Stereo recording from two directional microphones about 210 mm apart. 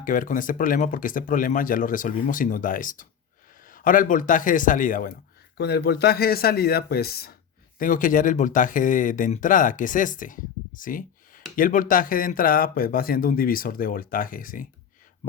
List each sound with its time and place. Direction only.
0.0 s speech: 40° left (ahead or behind)
5.5 s speech: 50° left (ahead or behind)